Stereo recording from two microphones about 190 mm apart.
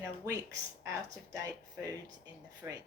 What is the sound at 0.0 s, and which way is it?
Speech, 15° right (ahead or behind).